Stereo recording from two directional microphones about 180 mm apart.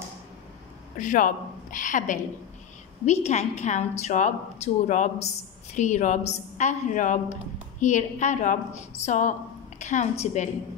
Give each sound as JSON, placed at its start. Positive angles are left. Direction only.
{"t": 0.9, "sound": "a woman's voice", "side_deg": 45}
{"t": 9.8, "sound": "a sound", "side_deg": 40}
{"t": 10.2, "sound": "a woman's voice", "side_deg": 40}